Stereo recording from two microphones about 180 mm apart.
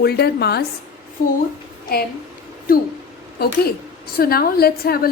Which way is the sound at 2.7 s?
50° left (ahead or behind).